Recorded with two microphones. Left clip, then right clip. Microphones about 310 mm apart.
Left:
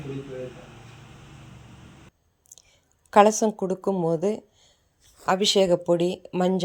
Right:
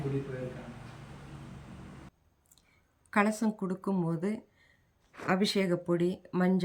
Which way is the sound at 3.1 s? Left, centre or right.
Centre.